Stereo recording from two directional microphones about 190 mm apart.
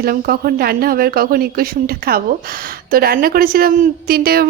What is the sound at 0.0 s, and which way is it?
A woman's voice, 50° right (ahead or behind).